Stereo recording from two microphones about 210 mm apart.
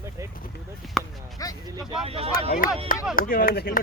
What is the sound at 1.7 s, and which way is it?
Speech, 15° right (ahead or behind).